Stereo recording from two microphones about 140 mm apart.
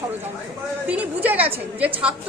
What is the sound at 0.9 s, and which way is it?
A woman's voice, 10° right (ahead or behind).